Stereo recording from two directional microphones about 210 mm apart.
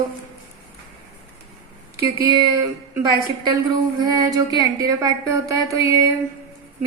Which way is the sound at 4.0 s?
20° right (ahead or behind).